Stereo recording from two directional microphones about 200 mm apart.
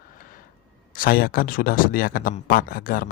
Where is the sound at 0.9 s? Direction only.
45° left (ahead or behind).